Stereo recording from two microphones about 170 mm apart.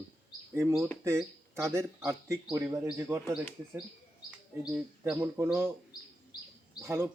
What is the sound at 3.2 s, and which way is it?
Speech, centre (ahead or behind).